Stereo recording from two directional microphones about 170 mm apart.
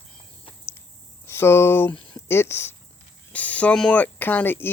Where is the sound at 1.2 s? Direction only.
15° left (ahead or behind).